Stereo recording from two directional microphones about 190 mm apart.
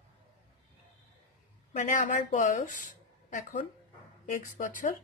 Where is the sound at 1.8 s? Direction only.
45° left (ahead or behind).